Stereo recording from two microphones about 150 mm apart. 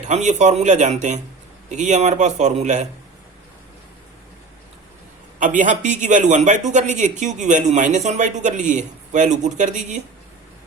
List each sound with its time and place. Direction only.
0.0 s a man's voice: 50° right (ahead or behind)
5.4 s speech: 60° right (ahead or behind)